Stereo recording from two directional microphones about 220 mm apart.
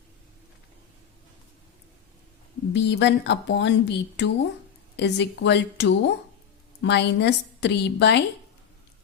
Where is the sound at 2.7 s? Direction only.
55° left (ahead or behind).